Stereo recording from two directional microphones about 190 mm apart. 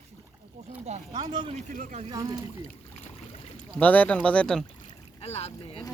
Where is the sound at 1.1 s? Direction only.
25° right (ahead or behind).